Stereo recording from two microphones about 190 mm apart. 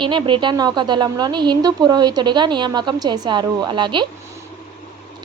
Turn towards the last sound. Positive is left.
turn(degrees=-25)  # may be behind; listen again after turning